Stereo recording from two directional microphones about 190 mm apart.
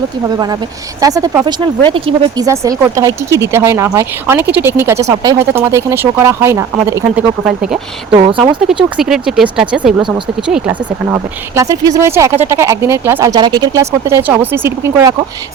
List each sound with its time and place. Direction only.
0.3 s speech: 20° right (ahead or behind)
2.5 s speech: 15° right (ahead or behind)
7.4 s speech: centre (ahead or behind)
8.1 s speech: 25° right (ahead or behind)
9.0 s speech: 5° right (ahead or behind)